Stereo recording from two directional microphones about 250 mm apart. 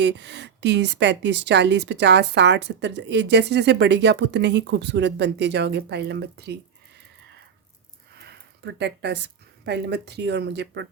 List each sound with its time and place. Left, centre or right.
0.0 s a woman's voice: right
8.1 s speech: right